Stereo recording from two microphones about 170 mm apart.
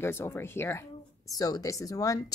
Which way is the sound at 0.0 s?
15° left (ahead or behind).